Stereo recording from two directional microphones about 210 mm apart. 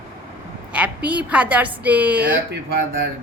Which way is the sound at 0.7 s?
5° right (ahead or behind).